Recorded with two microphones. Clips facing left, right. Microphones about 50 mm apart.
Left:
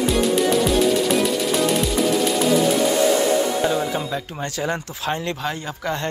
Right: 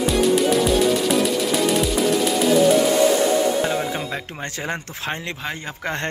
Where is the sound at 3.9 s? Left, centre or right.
Right.